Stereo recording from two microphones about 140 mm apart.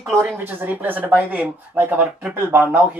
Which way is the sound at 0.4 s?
15° right (ahead or behind).